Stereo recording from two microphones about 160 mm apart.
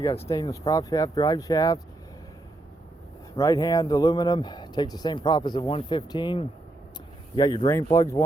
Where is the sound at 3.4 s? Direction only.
20° left (ahead or behind).